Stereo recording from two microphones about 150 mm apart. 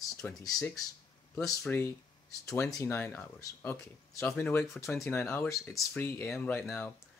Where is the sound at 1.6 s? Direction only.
15° left (ahead or behind).